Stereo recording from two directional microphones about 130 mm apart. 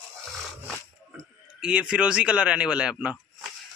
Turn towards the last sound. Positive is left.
turn(degrees=-5)  # may be behind; listen again after turning